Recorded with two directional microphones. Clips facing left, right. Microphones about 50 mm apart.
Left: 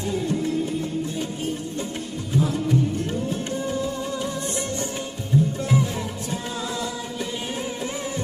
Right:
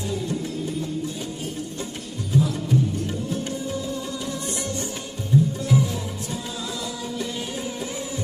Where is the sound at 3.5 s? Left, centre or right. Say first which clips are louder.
Left 3 dB; left.